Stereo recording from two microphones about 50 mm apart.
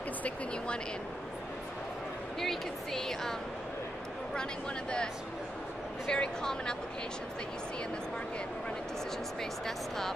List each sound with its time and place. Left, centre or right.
2.4 s speech: centre
4.4 s speech: centre
9.4 s speech: centre